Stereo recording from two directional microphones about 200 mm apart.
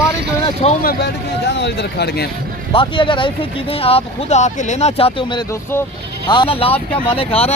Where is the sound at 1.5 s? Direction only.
60° left (ahead or behind).